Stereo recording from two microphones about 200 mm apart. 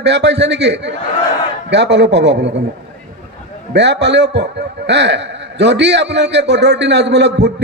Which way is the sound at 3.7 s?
60° right (ahead or behind).